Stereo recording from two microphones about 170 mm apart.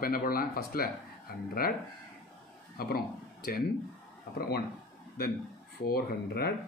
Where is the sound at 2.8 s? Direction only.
60° left (ahead or behind).